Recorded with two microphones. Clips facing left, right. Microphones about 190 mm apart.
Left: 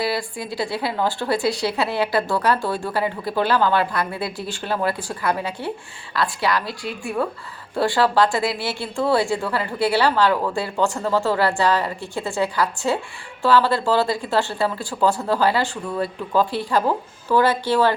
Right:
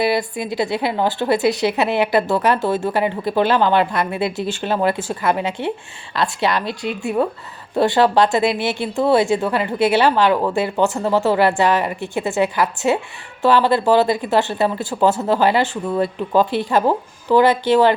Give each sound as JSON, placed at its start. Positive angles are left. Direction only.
{"t": 0.0, "sound": "speech", "side_deg": -20}